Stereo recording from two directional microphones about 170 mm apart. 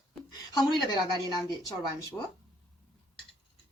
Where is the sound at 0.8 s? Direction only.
25° left (ahead or behind).